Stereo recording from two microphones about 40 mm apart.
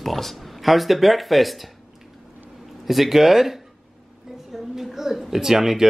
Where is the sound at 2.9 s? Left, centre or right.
Centre.